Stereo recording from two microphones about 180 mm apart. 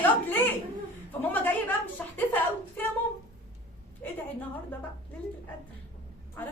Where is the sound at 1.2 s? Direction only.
10° left (ahead or behind).